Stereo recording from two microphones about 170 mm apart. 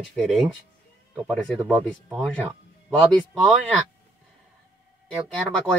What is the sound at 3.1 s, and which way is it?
Speech, centre (ahead or behind).